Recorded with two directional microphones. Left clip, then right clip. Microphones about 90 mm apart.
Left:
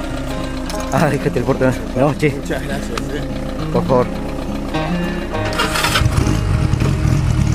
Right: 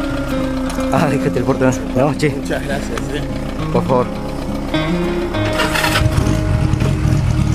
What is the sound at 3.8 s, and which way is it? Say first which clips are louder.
Speech: left 1 dB; 20° right (ahead or behind).